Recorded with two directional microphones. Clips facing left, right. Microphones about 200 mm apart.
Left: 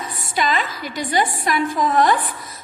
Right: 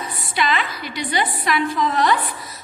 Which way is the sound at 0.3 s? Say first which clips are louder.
Left 1 dB; 45° left (ahead or behind).